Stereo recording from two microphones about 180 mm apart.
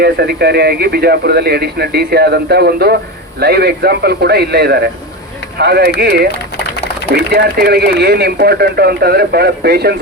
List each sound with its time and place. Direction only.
0.0 s speech: 65° right (ahead or behind)